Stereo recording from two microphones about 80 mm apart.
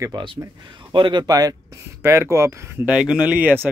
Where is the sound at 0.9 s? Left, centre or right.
Right.